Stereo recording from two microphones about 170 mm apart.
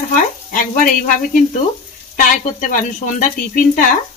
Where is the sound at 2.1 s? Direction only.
50° left (ahead or behind).